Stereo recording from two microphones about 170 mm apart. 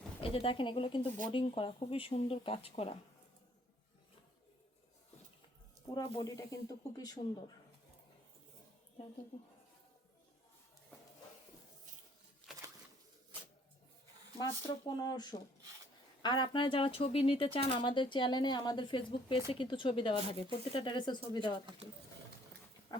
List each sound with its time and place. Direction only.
0.2 s speech: 30° left (ahead or behind)
5.9 s speech: 20° left (ahead or behind)
12.5 s bird: 5° right (ahead or behind)
14.8 s speech: 25° left (ahead or behind)
22.9 s dog: 25° left (ahead or behind)